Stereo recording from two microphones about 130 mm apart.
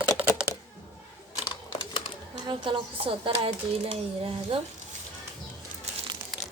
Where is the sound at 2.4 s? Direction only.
35° right (ahead or behind).